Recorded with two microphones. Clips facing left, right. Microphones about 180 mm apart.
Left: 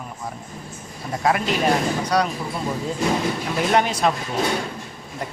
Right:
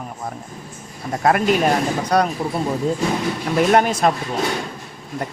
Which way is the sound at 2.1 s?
50° right (ahead or behind).